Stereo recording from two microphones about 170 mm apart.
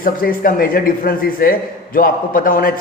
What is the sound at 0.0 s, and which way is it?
A man's voice, 55° left (ahead or behind).